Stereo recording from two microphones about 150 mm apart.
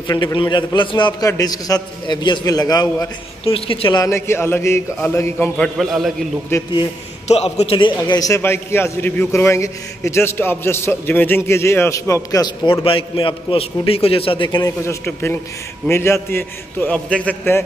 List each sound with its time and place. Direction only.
0.1 s a man's voice: 30° left (ahead or behind)
3.4 s a man's voice: 40° left (ahead or behind)
4.0 s a man's voice: 20° left (ahead or behind)
5.6 s a man's voice: centre (ahead or behind)
6.5 s a man's voice: 20° left (ahead or behind)
7.2 s a man's voice: 45° left (ahead or behind); by 12.8 s 25° left (ahead or behind)
12.8 s a man's voice: 35° left (ahead or behind); by 17.6 s 15° left (ahead or behind)